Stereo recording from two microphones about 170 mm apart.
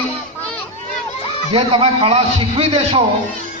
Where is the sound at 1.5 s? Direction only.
30° right (ahead or behind).